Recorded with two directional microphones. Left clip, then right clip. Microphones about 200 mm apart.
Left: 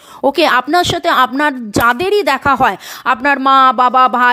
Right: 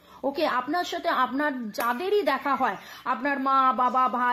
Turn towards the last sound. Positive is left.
turn(degrees=45)  # may be behind; listen again after turning